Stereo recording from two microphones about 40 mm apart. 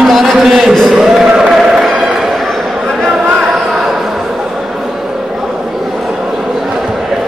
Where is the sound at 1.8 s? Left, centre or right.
Centre.